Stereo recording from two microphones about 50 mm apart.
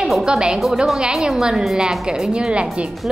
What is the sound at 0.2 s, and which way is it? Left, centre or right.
A woman's voice, centre.